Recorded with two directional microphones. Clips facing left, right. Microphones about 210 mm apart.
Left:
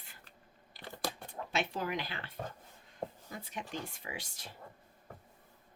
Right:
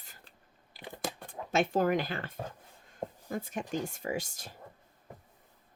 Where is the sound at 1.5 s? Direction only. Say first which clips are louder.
Right 9 dB; 50° right (ahead or behind).